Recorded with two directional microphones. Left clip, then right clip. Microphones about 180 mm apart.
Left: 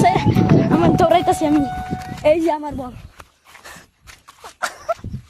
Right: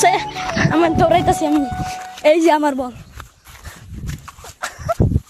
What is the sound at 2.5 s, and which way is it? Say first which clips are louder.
Speech: right 7 dB; 45° right (ahead or behind).